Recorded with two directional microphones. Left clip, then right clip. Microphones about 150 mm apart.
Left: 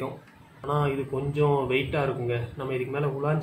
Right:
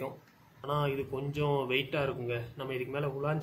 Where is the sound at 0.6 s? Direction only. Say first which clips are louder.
Left 5 dB; 35° right (ahead or behind).